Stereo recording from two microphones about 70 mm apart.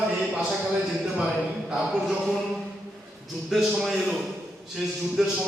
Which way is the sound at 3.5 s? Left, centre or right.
Centre.